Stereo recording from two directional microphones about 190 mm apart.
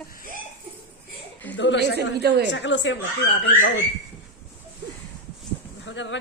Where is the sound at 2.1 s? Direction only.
60° right (ahead or behind).